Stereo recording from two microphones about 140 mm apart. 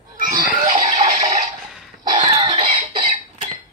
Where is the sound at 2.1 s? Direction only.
40° right (ahead or behind).